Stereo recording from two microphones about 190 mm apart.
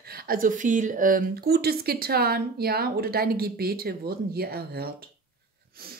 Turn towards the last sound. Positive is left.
turn(degrees=-55)  # may be behind; listen again after turning